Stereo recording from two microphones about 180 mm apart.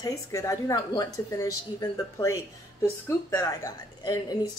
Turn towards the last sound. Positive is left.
turn(degrees=20)  # may be behind; listen again after turning